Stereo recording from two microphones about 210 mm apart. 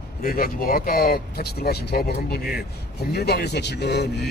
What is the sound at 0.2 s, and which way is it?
Speech, 45° left (ahead or behind).